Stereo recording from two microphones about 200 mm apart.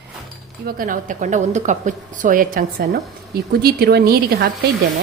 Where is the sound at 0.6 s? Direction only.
45° right (ahead or behind).